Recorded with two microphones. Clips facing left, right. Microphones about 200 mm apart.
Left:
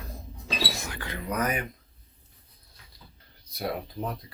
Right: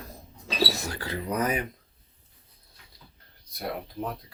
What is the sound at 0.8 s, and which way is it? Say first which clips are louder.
Speech: right 3 dB; 35° right (ahead or behind).